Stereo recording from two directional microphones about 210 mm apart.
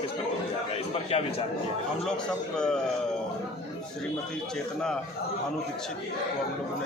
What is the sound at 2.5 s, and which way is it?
Speech, 5° left (ahead or behind).